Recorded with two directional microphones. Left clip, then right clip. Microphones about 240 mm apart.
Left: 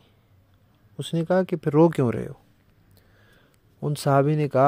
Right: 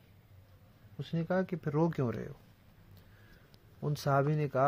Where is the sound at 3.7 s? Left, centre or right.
Left.